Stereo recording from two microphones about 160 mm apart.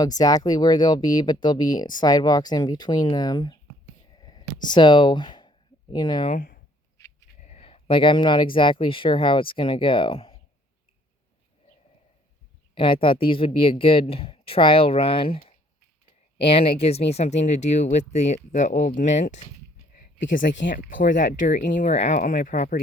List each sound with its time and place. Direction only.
0.0 s speech: 25° left (ahead or behind)
4.1 s a sound: 25° left (ahead or behind)
6.3 s speech: 60° left (ahead or behind)
7.4 s speech: 40° left (ahead or behind)
12.7 s speech: 30° left (ahead or behind); by 19.4 s 50° left (ahead or behind)
19.9 s speech: 60° left (ahead or behind)